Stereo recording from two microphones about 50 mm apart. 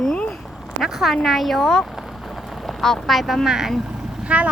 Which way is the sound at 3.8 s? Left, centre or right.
Centre.